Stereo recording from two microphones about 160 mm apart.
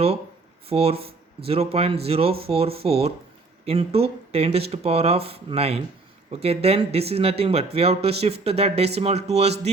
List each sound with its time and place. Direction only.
0.7 s speech: 40° right (ahead or behind)